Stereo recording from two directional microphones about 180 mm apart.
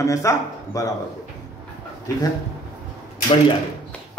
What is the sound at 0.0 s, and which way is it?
Speech, 15° left (ahead or behind).